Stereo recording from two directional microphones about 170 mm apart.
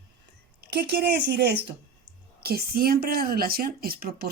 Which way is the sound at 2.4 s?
65° right (ahead or behind).